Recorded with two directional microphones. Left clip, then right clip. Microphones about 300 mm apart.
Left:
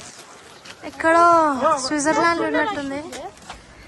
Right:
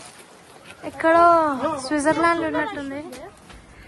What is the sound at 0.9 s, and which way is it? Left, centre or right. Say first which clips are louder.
Speech: left 1 dB; centre.